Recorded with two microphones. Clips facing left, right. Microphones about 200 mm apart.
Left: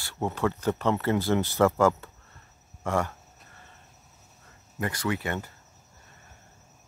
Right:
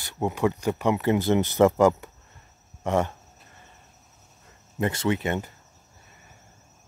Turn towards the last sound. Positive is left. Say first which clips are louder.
# right 4 dB
turn(degrees=-20)  # may be behind; listen again after turning